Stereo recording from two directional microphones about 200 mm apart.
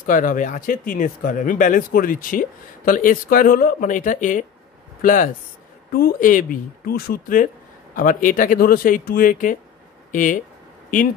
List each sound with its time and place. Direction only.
0.0 s speech: 40° left (ahead or behind)